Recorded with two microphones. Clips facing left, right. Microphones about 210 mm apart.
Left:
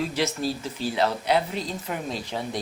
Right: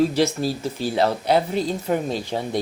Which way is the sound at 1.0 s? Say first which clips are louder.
Right 4 dB; 35° right (ahead or behind).